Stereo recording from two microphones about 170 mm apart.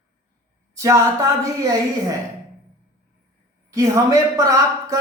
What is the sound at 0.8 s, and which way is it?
Speech, 20° right (ahead or behind).